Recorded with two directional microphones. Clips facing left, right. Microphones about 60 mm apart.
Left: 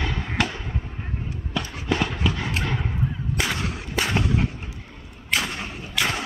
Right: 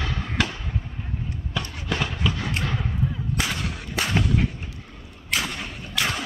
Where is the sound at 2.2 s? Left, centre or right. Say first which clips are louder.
Left 1 dB; left.